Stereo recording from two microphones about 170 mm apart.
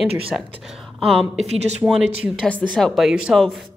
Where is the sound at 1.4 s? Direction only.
40° right (ahead or behind).